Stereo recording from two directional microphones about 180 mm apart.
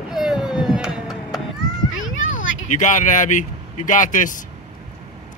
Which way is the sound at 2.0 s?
90° left.